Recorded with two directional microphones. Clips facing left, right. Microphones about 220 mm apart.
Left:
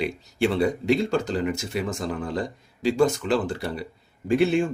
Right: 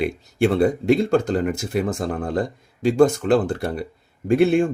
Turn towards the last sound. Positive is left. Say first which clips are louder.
# right 4 dB
turn(degrees=-55)  # may be behind; listen again after turning